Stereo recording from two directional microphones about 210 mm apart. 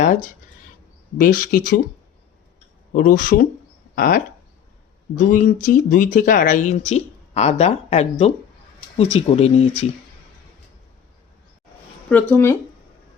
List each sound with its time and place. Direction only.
0.0 s a sound: 35° left (ahead or behind)
1.2 s speech: 40° left (ahead or behind)
2.9 s speech: 40° left (ahead or behind)
12.0 s speech: 10° left (ahead or behind)